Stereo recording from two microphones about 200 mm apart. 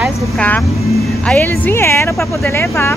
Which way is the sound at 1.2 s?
5° left (ahead or behind).